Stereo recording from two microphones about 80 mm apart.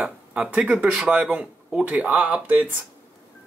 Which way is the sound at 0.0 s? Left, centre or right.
Centre.